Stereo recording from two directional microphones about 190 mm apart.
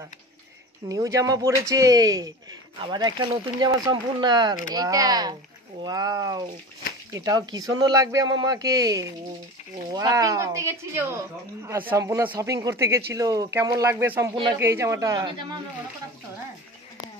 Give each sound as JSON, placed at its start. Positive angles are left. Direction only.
{"t": 0.8, "sound": "speech", "side_deg": -20}